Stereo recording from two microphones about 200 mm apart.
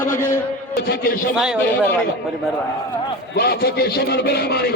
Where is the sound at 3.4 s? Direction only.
50° left (ahead or behind).